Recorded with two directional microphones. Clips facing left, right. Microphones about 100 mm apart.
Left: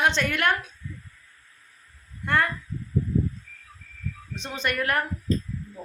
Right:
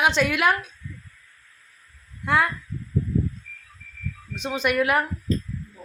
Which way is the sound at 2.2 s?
5° right (ahead or behind).